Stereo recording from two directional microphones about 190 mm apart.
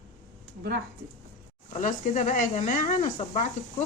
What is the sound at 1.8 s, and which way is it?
Speech, 40° left (ahead or behind).